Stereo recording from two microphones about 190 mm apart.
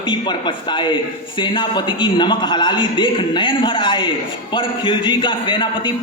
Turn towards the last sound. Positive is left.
turn(degrees=25)  # may be behind; listen again after turning